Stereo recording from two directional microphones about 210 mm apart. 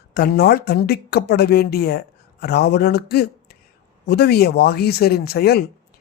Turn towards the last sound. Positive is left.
turn(degrees=50)  # may be behind; listen again after turning